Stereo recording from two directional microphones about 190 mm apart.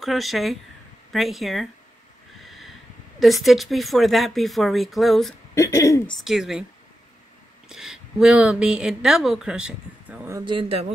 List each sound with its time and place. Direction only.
0.0 s speech: centre (ahead or behind)
2.4 s a sound: centre (ahead or behind)
3.2 s speech: centre (ahead or behind)
5.5 s speech: 15° left (ahead or behind)
6.1 s speech: centre (ahead or behind)
7.6 s speech: 5° right (ahead or behind)
10.4 s a man's voice: 25° right (ahead or behind)